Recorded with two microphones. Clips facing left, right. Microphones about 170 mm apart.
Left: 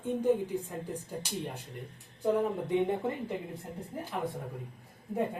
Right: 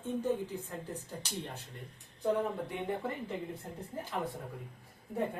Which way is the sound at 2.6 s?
20° left (ahead or behind).